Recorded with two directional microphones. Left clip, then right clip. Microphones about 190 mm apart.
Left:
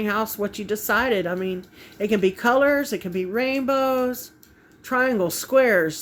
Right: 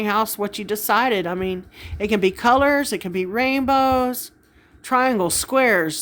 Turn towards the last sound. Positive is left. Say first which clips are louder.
# even
turn(degrees=-20)  # may be behind; listen again after turning